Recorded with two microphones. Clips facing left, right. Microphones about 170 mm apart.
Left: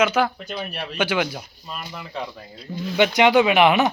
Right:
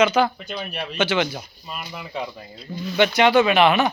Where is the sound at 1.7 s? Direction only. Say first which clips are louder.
Right 1 dB; 10° right (ahead or behind).